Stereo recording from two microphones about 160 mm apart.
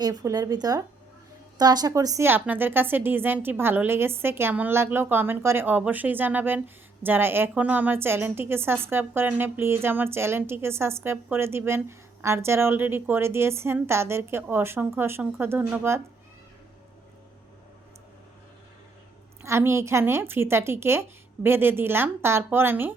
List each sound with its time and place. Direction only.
0.0 s a woman's voice: 25° right (ahead or behind)
19.4 s a woman's voice: 15° right (ahead or behind)